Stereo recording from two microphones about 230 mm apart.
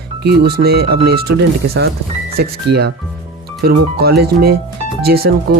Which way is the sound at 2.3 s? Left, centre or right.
Right.